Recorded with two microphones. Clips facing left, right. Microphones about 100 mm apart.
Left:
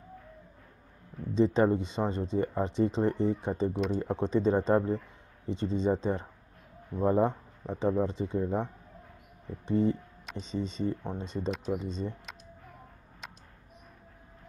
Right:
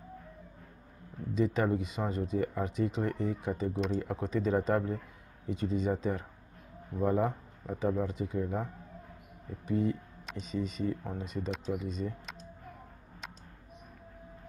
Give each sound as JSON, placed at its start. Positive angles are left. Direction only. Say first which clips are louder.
{"t": 1.3, "sound": "speech", "louder": "left 5 dB", "side_deg": 30}
{"t": 9.7, "sound": "speech", "louder": "left 4 dB", "side_deg": 30}